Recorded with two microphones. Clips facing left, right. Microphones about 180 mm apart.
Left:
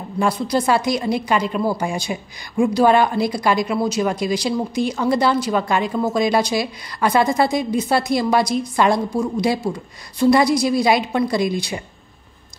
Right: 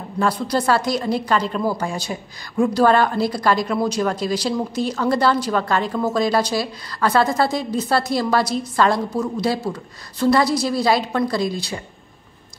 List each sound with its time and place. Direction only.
0.2 s a woman's voice: 10° left (ahead or behind)